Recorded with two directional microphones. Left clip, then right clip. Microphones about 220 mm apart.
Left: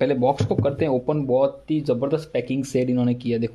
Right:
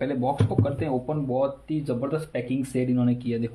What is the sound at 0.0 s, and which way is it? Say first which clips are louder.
Speech: left 6 dB; 50° left (ahead or behind).